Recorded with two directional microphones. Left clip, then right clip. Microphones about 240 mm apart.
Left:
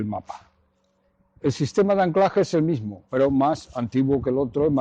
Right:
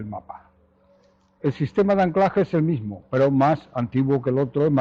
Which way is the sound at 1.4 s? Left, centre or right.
Left.